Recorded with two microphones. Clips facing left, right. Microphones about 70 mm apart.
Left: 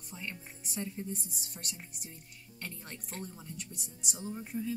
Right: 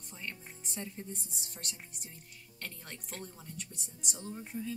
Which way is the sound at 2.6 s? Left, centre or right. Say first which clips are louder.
Left 1 dB; centre.